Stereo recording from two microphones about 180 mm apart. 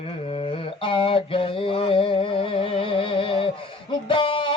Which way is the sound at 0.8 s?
30° left (ahead or behind).